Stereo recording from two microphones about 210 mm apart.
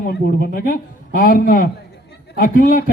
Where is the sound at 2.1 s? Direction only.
45° left (ahead or behind).